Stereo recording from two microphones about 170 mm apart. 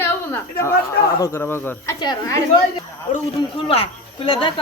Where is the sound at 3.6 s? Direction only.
35° left (ahead or behind).